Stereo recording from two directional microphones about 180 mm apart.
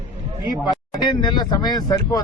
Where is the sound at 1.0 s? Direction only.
25° left (ahead or behind).